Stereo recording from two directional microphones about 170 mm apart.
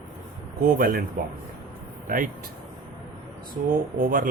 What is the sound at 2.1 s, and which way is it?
Speech, 55° right (ahead or behind).